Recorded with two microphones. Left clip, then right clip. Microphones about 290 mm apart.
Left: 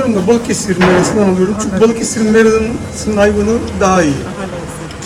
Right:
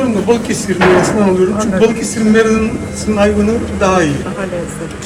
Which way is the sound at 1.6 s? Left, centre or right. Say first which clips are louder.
Even; left.